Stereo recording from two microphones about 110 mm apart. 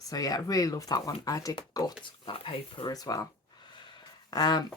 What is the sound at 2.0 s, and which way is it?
Speech, 50° left (ahead or behind).